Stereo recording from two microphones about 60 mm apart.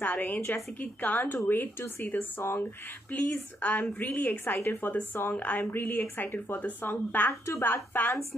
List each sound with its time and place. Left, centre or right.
0.0 s a woman's voice: left